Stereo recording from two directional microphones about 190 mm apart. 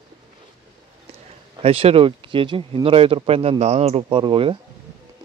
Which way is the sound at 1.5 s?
30° right (ahead or behind).